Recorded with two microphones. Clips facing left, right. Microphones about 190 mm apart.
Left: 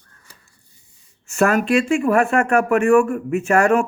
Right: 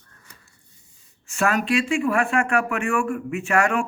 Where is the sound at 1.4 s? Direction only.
45° left (ahead or behind).